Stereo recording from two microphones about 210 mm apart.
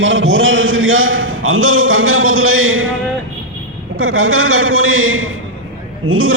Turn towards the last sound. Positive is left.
turn(degrees=-75)  # may be behind; listen again after turning